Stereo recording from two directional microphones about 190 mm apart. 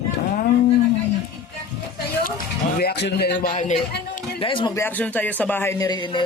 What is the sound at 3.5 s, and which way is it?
Speech, 40° left (ahead or behind).